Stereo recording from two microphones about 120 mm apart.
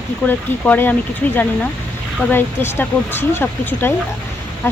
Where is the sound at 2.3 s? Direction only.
20° left (ahead or behind).